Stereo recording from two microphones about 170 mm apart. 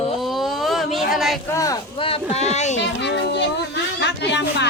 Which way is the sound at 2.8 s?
90° left.